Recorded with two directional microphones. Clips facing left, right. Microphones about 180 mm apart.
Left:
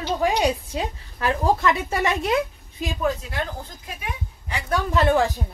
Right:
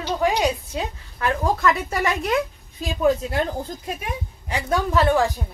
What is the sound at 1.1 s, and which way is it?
Speech, 30° left (ahead or behind).